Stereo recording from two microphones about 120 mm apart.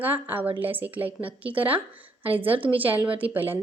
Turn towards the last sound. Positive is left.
turn(degrees=-15)  # may be behind; listen again after turning